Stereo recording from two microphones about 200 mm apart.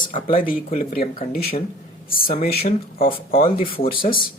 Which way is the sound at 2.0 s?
45° left (ahead or behind).